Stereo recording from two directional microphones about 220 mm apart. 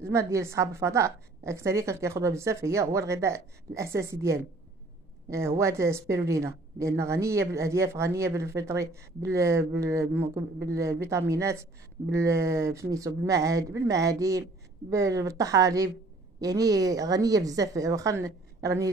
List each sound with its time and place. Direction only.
0.0 s a woman's voice: 15° right (ahead or behind)